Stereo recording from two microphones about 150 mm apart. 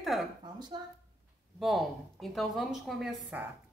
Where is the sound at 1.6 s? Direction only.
Centre (ahead or behind).